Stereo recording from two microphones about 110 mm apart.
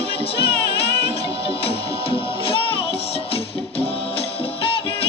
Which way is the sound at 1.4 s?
55° left (ahead or behind).